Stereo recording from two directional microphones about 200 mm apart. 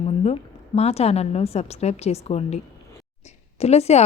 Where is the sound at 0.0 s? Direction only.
30° left (ahead or behind).